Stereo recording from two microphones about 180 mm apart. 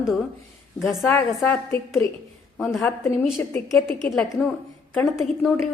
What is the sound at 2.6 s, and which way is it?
Speech, centre (ahead or behind).